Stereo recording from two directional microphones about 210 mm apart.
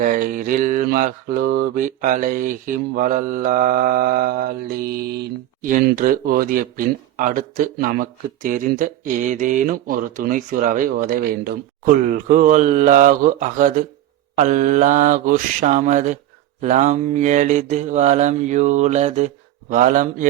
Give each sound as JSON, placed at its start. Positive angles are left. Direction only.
{"t": 0.0, "sound": "mantra", "side_deg": -40}